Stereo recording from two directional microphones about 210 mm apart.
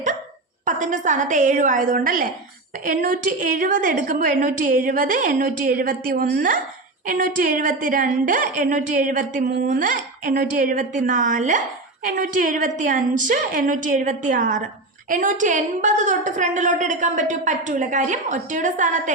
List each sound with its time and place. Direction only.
0.6 s a woman's voice: 35° right (ahead or behind)